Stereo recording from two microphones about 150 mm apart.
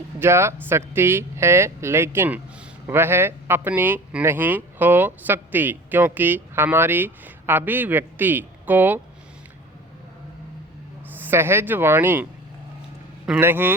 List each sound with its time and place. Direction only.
0.2 s speech: 15° right (ahead or behind)
11.2 s speech: 15° right (ahead or behind)